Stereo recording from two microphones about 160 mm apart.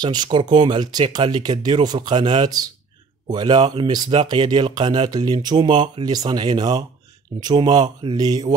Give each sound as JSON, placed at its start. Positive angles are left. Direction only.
{"t": 0.0, "sound": "speech", "side_deg": -25}